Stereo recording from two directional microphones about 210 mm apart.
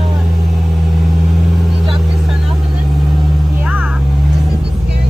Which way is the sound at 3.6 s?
5° right (ahead or behind).